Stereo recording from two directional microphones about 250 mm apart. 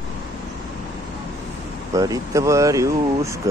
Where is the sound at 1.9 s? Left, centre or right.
Centre.